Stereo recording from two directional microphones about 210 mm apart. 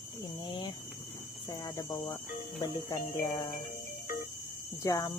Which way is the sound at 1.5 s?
15° left (ahead or behind).